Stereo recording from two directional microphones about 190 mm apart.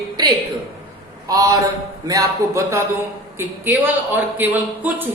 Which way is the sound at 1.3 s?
15° right (ahead or behind).